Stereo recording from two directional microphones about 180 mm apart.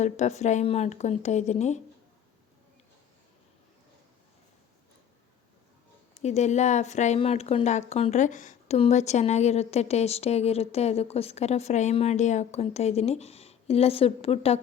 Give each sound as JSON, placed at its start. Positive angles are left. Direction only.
{"t": 0.0, "sound": "speech", "side_deg": 40}
{"t": 6.1, "sound": "speech", "side_deg": 40}